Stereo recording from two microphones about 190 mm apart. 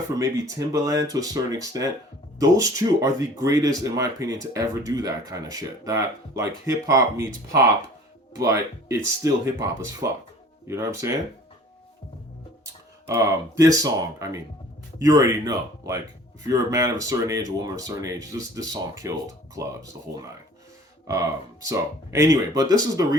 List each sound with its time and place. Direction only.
0.1 s speech: 15° right (ahead or behind)
13.1 s speech: 15° right (ahead or behind)
21.1 s speech: 15° right (ahead or behind)